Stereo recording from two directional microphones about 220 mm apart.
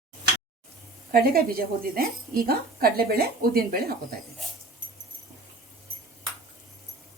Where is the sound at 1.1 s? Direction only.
40° right (ahead or behind).